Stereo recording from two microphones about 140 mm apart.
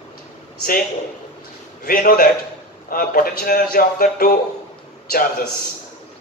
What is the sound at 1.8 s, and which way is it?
Speech, 90° left.